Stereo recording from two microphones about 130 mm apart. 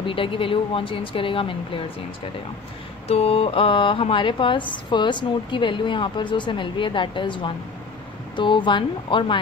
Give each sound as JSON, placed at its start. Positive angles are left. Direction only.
{"t": 0.0, "sound": "a woman's voice", "side_deg": 45}
{"t": 3.1, "sound": "a woman's voice", "side_deg": 50}